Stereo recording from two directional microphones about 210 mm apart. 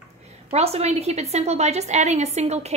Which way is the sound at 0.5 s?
30° right (ahead or behind).